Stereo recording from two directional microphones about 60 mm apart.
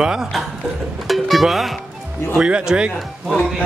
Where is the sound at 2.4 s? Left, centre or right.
Centre.